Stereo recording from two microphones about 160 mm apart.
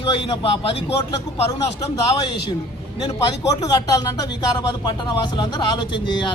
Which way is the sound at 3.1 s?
20° left (ahead or behind).